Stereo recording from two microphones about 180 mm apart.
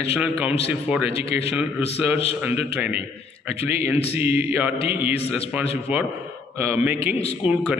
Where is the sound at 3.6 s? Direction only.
10° right (ahead or behind).